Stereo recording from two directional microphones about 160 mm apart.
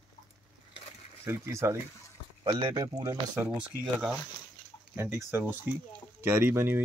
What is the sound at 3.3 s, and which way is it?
Speech, 5° right (ahead or behind).